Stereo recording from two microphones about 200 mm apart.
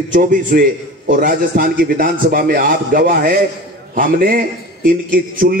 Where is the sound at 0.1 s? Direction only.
40° right (ahead or behind).